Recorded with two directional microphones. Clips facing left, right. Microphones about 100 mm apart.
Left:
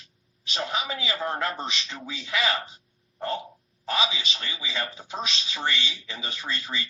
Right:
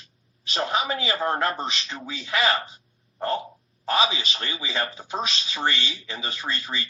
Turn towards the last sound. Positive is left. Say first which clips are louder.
# right 2 dB
turn(degrees=-45)  # may be behind; listen again after turning